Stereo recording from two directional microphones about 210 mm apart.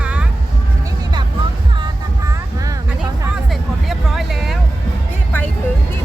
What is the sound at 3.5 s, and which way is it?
Vehicle, centre (ahead or behind).